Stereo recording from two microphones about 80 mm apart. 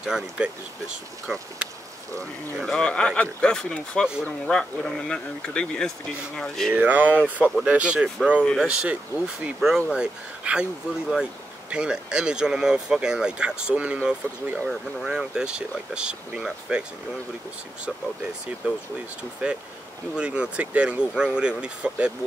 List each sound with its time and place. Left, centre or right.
0.0 s speech: centre
2.6 s speech: centre
6.7 s speech: centre
14.7 s speech: centre
18.6 s speech: centre